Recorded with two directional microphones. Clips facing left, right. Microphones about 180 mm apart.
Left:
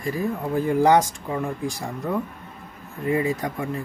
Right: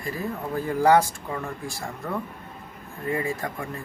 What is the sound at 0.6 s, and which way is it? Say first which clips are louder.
Speech: left 1 dB; 20° left (ahead or behind).